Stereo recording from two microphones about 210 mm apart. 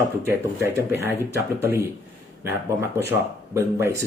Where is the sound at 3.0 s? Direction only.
10° right (ahead or behind).